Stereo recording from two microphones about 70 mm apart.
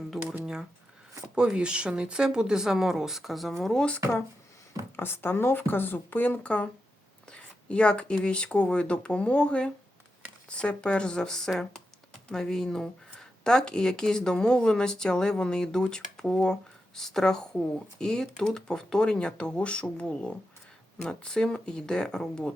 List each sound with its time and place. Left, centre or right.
0.1 s speech: centre
1.4 s speech: centre
4.9 s speech: left; by 22.5 s centre